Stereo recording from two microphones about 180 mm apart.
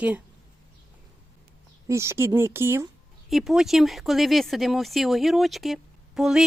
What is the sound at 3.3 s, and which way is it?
Speech, centre (ahead or behind).